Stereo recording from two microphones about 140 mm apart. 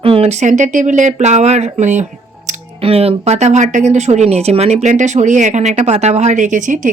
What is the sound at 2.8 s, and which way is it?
Speech, 45° right (ahead or behind).